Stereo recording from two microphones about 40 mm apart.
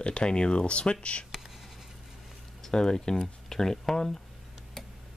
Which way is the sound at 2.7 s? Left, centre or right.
Centre.